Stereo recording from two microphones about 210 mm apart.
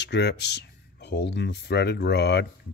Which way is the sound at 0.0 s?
55° left (ahead or behind).